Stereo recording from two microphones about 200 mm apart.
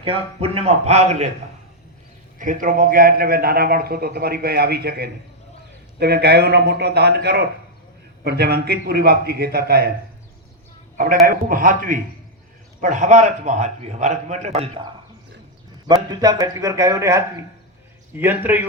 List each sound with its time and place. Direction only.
0.0 s a man's voice: 30° right (ahead or behind)
2.4 s a man's voice: 40° right (ahead or behind)
10.9 s a man's voice: 45° right (ahead or behind)
16.0 s speech: 20° right (ahead or behind)